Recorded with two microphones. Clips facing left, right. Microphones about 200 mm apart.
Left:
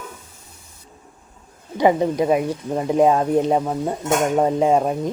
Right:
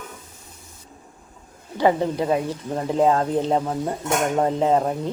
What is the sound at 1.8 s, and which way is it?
Speech, 15° left (ahead or behind).